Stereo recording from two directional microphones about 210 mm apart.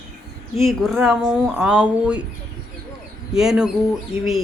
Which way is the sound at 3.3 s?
Centre (ahead or behind).